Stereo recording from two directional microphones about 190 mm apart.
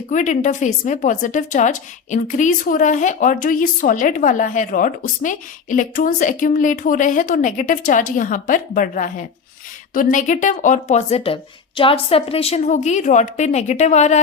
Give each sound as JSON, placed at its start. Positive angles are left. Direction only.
{"t": 0.1, "sound": "a woman's voice", "side_deg": 40}